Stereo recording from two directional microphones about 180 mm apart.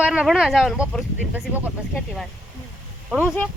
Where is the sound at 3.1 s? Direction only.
5° right (ahead or behind).